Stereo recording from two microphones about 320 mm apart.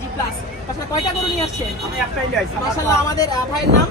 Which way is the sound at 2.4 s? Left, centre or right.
Centre.